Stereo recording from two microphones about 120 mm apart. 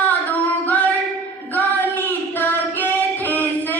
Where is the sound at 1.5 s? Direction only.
15° left (ahead or behind).